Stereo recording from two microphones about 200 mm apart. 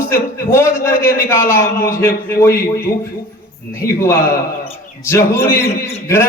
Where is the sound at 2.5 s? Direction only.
45° left (ahead or behind).